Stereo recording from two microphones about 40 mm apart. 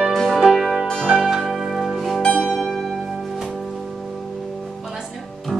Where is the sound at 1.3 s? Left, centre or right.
Centre.